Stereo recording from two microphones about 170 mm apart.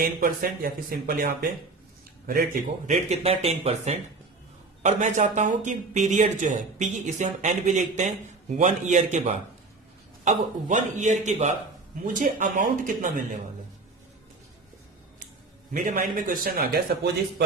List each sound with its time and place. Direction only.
0.0 s speech: 60° right (ahead or behind)
3.1 s speech: 35° right (ahead or behind)
15.7 s speech: 50° right (ahead or behind); by 17.4 s 70° right (ahead or behind)